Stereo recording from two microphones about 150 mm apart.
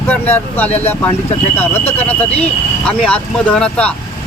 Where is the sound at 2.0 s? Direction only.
10° left (ahead or behind).